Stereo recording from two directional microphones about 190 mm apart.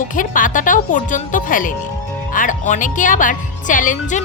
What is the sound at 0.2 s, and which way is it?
Speech, 45° left (ahead or behind).